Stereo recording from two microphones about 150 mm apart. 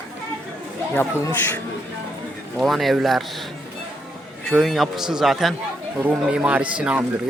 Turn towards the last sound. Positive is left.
turn(degrees=-10)  # may be behind; listen again after turning